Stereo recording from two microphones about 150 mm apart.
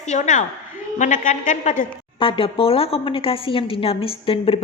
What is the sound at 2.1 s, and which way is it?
A woman's voice, 35° left (ahead or behind).